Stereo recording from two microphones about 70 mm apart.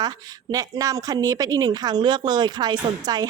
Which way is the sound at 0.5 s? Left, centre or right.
Right.